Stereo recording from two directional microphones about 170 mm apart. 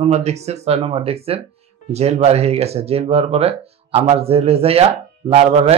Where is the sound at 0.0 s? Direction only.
40° right (ahead or behind).